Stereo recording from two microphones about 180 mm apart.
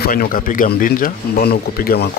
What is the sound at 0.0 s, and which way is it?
Speech, 55° left (ahead or behind).